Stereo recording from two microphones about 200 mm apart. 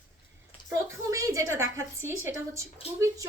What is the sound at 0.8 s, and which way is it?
Speech, 15° right (ahead or behind).